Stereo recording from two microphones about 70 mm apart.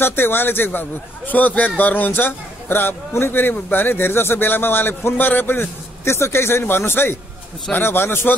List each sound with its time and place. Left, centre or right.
0.0 s a man's voice: left